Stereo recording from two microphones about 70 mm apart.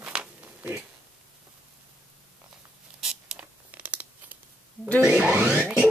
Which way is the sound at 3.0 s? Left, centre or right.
Centre.